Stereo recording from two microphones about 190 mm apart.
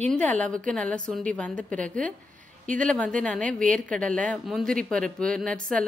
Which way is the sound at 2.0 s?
45° right (ahead or behind).